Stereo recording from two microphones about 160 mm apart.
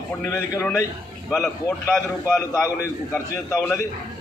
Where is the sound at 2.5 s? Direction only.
15° left (ahead or behind).